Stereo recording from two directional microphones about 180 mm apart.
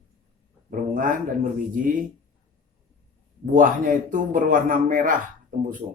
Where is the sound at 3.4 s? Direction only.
45° right (ahead or behind).